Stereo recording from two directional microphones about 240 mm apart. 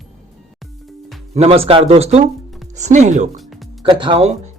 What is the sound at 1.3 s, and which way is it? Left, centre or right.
Speech, right.